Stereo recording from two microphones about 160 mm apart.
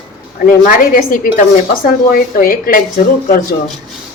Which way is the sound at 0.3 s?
60° left (ahead or behind).